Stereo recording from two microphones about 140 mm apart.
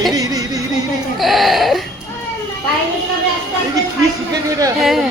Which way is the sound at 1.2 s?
Centre (ahead or behind).